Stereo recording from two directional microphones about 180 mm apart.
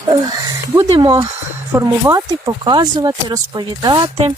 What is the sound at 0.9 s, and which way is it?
Speech, 30° right (ahead or behind).